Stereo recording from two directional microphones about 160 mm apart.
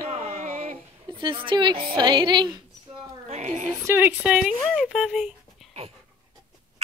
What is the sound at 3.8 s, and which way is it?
Speech, 10° right (ahead or behind).